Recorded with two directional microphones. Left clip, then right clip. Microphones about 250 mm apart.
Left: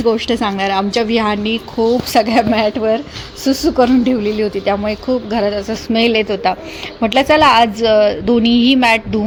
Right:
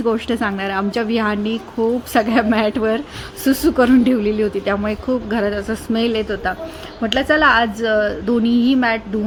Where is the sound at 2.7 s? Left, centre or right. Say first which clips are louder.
Left 3 dB; right.